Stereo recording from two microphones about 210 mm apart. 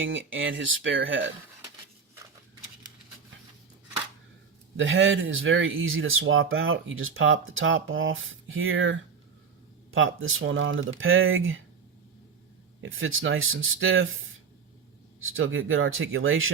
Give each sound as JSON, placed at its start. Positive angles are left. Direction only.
{"t": 0.0, "sound": "speech", "side_deg": -65}
{"t": 4.8, "sound": "speech", "side_deg": -65}
{"t": 12.8, "sound": "speech", "side_deg": -70}